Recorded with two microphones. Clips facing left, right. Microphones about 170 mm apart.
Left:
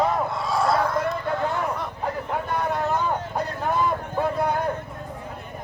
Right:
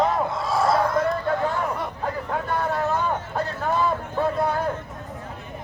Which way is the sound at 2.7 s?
15° left (ahead or behind).